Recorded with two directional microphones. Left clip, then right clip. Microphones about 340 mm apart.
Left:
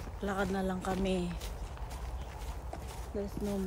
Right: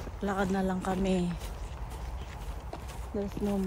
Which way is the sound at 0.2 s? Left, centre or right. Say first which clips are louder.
Right 3 dB; centre.